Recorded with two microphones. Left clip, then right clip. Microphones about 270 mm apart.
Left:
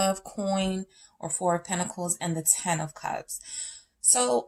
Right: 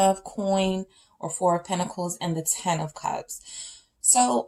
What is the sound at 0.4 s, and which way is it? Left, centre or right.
Speech, left.